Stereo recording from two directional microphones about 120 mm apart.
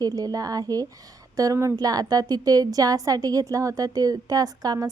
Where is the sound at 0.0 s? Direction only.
30° right (ahead or behind).